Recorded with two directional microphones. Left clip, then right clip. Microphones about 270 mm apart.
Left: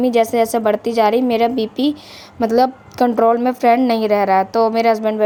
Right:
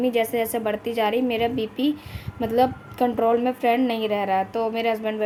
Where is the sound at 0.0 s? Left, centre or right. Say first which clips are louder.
Left 8 dB; left.